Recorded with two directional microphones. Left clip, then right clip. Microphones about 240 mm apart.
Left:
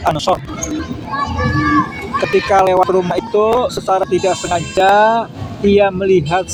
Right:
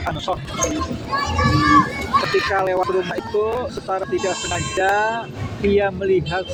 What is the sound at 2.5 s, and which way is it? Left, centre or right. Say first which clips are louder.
Speech: left 8 dB; left.